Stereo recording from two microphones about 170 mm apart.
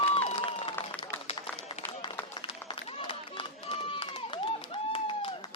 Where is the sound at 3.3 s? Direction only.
35° left (ahead or behind).